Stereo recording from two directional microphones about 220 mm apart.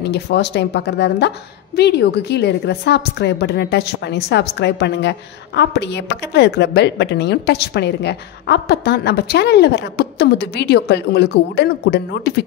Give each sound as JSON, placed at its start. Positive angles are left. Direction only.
{"t": 0.0, "sound": "a woman's voice", "side_deg": 50}